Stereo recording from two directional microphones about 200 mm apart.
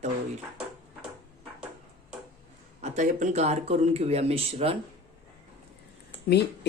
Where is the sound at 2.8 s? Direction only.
35° right (ahead or behind).